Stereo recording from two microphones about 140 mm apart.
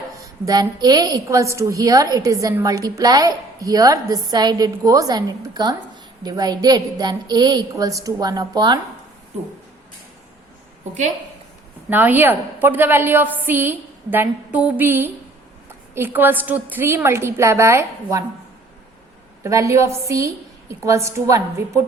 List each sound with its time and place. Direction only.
0.2 s a woman's voice: 25° right (ahead or behind)
11.9 s a woman's voice: 15° right (ahead or behind)
19.4 s a woman's voice: 20° right (ahead or behind)